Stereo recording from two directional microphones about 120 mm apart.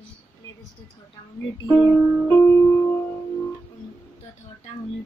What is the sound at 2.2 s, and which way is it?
Music, 20° left (ahead or behind).